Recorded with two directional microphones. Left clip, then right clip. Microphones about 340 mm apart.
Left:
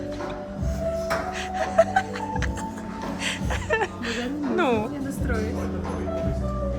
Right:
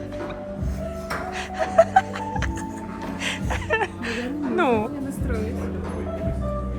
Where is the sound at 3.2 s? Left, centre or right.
Centre.